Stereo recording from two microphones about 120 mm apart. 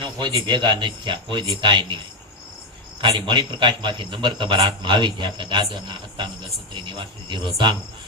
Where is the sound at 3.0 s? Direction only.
40° right (ahead or behind).